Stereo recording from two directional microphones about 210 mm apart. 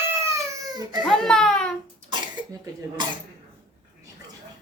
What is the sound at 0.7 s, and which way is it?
Speech, 20° right (ahead or behind).